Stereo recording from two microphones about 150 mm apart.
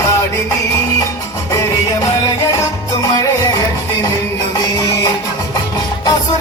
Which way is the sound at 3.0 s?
25° left (ahead or behind).